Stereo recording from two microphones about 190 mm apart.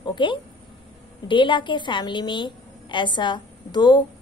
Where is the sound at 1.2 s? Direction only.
25° left (ahead or behind).